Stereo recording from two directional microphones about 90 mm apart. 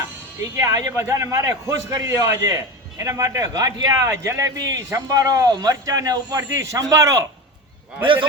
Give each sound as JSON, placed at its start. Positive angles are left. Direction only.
{"t": 0.5, "sound": "a man's voice", "side_deg": -35}
{"t": 8.0, "sound": "a man's voice", "side_deg": -70}